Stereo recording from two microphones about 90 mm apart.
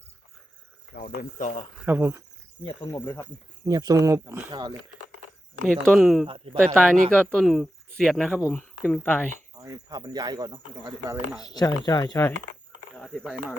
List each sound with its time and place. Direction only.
1.8 s speech: 25° right (ahead or behind)
2.9 s speech: 25° left (ahead or behind)
3.6 s speech: 45° right (ahead or behind)
5.6 s speech: centre (ahead or behind)
6.2 s speech: 90° right
6.7 s speech: 10° left (ahead or behind)
8.4 s speech: 15° left (ahead or behind)
9.6 s speech: 45° right (ahead or behind)
11.4 s speech: 45° left (ahead or behind)
13.0 s a sound: 5° left (ahead or behind)